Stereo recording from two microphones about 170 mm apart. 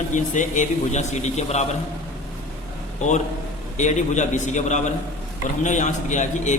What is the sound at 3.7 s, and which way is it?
A man's voice, 45° left (ahead or behind).